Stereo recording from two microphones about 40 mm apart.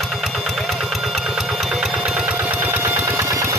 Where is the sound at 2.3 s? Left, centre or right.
Right.